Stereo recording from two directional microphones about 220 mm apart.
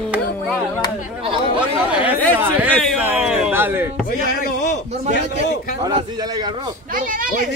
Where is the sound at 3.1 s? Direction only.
5° right (ahead or behind).